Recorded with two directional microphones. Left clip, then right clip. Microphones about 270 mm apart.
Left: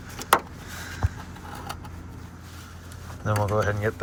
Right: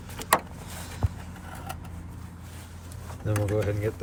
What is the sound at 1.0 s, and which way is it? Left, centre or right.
Vehicle, centre.